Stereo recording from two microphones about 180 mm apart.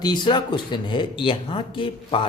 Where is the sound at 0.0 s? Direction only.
25° left (ahead or behind).